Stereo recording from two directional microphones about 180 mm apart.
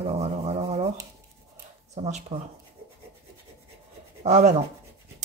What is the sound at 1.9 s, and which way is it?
Speech, 40° right (ahead or behind).